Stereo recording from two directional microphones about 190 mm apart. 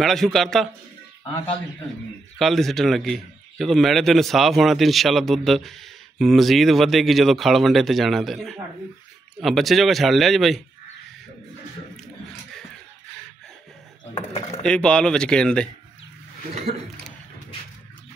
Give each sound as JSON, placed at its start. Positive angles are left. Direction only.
{"t": 0.0, "sound": "a man's voice", "side_deg": 0}
{"t": 2.3, "sound": "a man's voice", "side_deg": 0}
{"t": 12.0, "sound": "a sound", "side_deg": 0}
{"t": 14.6, "sound": "a man's voice", "side_deg": 5}